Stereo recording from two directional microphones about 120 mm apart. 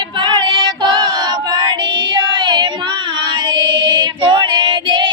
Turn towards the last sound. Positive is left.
turn(degrees=-40)  # may be behind; listen again after turning